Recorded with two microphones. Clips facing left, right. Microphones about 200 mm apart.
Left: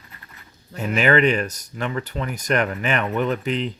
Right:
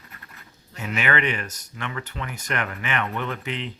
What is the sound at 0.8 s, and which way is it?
Speech, 35° left (ahead or behind).